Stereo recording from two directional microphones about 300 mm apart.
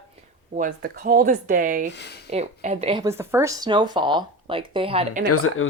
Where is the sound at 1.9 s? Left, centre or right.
Left.